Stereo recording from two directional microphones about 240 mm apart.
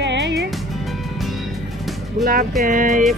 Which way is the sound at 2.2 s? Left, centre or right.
Right.